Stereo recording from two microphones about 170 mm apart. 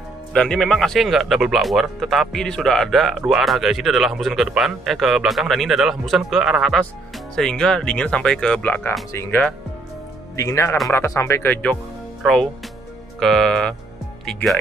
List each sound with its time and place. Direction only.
0.3 s speech: 5° left (ahead or behind)